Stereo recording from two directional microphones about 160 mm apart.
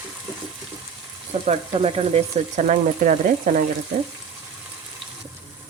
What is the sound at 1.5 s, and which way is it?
Speech, 40° right (ahead or behind).